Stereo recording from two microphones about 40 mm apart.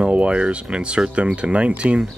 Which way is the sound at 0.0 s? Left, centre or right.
Right.